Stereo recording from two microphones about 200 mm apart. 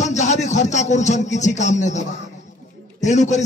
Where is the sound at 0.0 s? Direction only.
35° left (ahead or behind).